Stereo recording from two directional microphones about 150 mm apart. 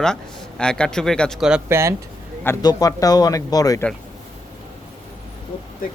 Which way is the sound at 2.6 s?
25° left (ahead or behind).